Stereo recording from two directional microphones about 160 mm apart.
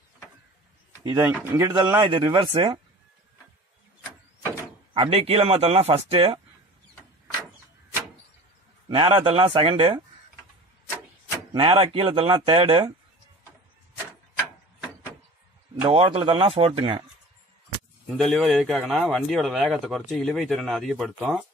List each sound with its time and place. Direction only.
1.0 s speech: 25° right (ahead or behind)
4.9 s speech: 35° right (ahead or behind)
8.8 s speech: 30° right (ahead or behind)
11.5 s speech: 35° right (ahead or behind)
15.7 s speech: 35° right (ahead or behind)
18.0 s speech: centre (ahead or behind)